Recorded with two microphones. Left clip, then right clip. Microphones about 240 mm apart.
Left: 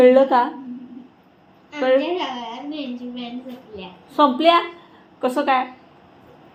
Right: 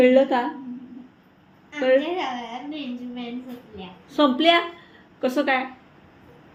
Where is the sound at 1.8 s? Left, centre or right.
Centre.